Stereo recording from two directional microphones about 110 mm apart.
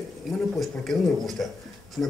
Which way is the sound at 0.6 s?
Centre (ahead or behind).